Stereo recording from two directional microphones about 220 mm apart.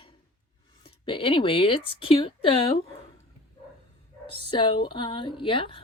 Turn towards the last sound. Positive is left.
turn(degrees=25)  # may be behind; listen again after turning